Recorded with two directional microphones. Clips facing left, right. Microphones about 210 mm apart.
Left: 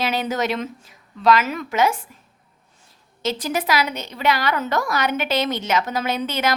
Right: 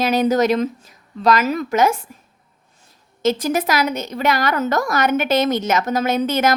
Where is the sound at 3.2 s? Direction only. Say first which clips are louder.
Right 5 dB; 45° right (ahead or behind).